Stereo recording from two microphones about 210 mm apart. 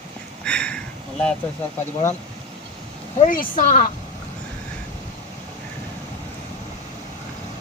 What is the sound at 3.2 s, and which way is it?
Speech, 40° left (ahead or behind).